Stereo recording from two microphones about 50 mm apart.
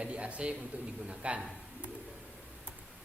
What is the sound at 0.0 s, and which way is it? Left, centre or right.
A man's voice, right.